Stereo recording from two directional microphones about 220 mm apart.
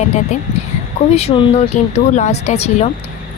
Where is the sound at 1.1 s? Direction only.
30° left (ahead or behind).